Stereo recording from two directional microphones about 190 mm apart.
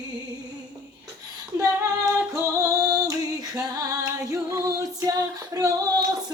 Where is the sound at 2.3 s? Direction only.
15° right (ahead or behind).